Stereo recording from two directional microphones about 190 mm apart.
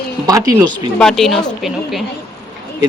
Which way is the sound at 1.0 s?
Centre (ahead or behind).